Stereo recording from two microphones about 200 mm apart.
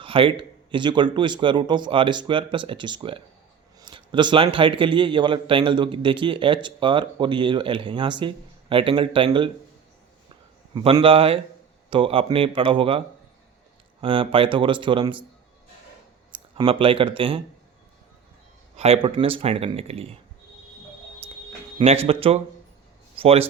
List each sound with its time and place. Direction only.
0.0 s a man's voice: 25° right (ahead or behind)
10.8 s a man's voice: 25° right (ahead or behind)
14.0 s a man's voice: 25° right (ahead or behind)
16.3 s speech: 25° right (ahead or behind)
18.8 s a man's voice: 30° right (ahead or behind)
22.0 s a man's voice: 30° right (ahead or behind)